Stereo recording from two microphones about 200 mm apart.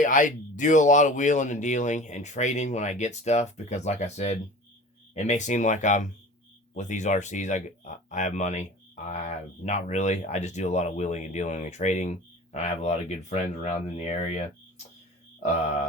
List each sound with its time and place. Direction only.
0.0 s speech: 40° left (ahead or behind)